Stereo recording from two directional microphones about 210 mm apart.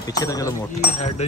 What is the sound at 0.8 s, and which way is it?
Speech, 30° left (ahead or behind).